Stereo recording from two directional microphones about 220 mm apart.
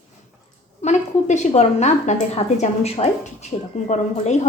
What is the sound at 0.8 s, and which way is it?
A woman's voice, 30° left (ahead or behind).